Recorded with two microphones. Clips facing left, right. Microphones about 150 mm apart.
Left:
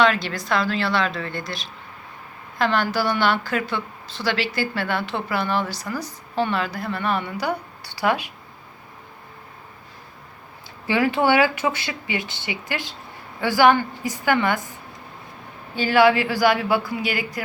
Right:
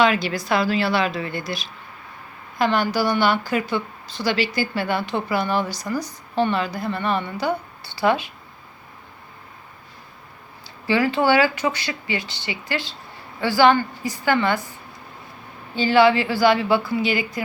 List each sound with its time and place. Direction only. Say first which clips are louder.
0.0 s a woman's voice: right 1 dB; 5° right (ahead or behind)
2.6 s a woman's voice: right 1 dB; centre (ahead or behind)
10.8 s a woman's voice: right 1 dB; 20° left (ahead or behind)